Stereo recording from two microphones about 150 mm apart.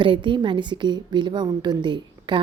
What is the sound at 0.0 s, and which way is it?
A woman's voice, 35° right (ahead or behind).